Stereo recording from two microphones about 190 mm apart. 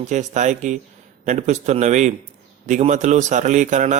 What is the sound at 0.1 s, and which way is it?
A man's voice, 40° right (ahead or behind).